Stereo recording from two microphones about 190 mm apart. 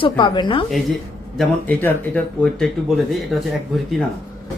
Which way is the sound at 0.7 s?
Centre (ahead or behind).